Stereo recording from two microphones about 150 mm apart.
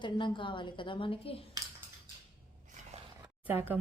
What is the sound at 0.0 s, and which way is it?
A woman's voice, 35° left (ahead or behind).